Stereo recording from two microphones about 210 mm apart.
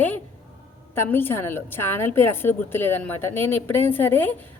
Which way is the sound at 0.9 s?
10° left (ahead or behind).